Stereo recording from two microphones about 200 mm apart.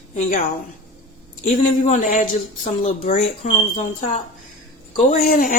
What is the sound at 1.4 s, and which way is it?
A woman's voice, 35° left (ahead or behind).